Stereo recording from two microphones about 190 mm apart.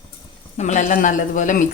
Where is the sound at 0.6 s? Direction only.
40° left (ahead or behind).